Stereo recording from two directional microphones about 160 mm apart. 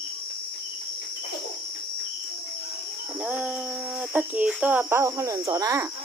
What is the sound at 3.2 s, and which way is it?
Speech, 10° right (ahead or behind).